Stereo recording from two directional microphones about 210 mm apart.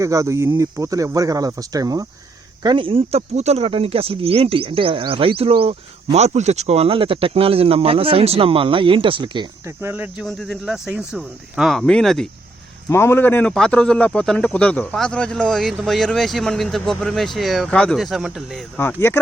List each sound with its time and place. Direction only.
0.0 s speech: 15° right (ahead or behind)
10.2 s speech: centre (ahead or behind)
18.8 s speech: 10° left (ahead or behind)